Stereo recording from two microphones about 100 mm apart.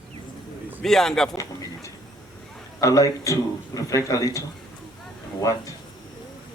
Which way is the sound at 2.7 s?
30° left (ahead or behind).